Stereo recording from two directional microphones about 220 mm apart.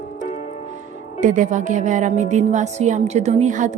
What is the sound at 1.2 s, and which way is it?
A woman's voice, 35° right (ahead or behind).